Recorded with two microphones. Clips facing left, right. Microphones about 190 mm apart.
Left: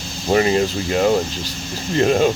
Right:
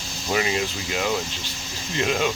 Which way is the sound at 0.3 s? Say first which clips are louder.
Left 8 dB; 40° left (ahead or behind).